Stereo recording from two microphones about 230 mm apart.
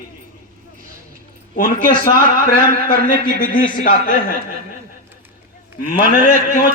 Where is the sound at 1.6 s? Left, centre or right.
Left.